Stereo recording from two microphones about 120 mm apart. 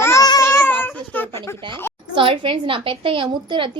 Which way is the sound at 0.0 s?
25° left (ahead or behind).